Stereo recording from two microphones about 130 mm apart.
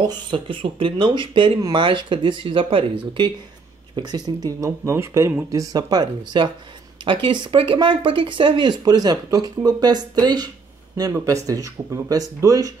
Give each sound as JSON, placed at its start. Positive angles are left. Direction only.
{"t": 0.0, "sound": "speech", "side_deg": -35}
{"t": 3.9, "sound": "speech", "side_deg": -30}